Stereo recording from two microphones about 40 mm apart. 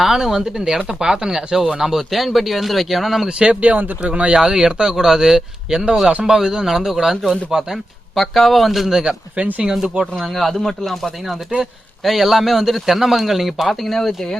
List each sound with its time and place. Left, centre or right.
0.0 s a man's voice: centre
3.2 s speech: right
3.6 s speech: right
4.4 s speech: centre
7.5 s speech: right
8.1 s a man's voice: centre